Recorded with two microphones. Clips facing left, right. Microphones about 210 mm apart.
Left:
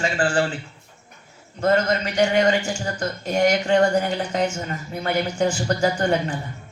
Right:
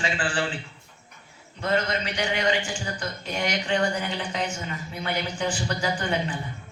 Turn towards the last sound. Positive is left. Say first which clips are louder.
# left 6 dB
turn(degrees=45)  # may be behind; listen again after turning